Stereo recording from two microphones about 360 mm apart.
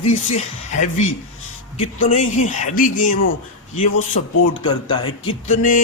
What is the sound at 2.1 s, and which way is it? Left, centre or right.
Speech, centre.